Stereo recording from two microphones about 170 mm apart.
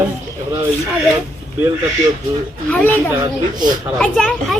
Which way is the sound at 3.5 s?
50° right (ahead or behind).